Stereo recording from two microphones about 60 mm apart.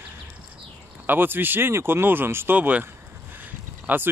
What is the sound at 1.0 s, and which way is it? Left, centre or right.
Speech, right.